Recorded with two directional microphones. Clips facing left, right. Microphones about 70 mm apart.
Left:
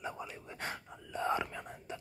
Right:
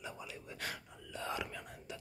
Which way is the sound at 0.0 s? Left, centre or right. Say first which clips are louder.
Left 5 dB; left.